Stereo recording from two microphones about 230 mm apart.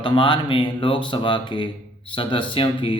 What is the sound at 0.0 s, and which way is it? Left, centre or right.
Speech, left.